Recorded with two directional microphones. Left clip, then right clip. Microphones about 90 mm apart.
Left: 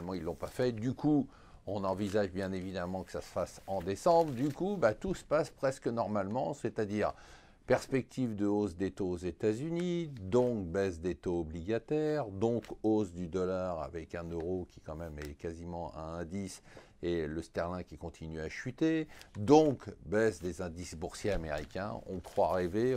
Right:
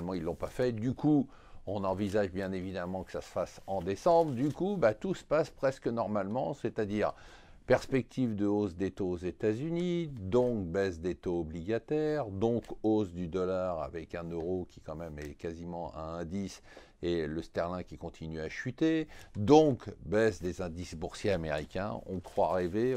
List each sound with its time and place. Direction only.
0.0 s speech: 65° right (ahead or behind)
0.6 s speech: 35° right (ahead or behind)
21.3 s speech: 90° right
22.1 s speech: 50° right (ahead or behind)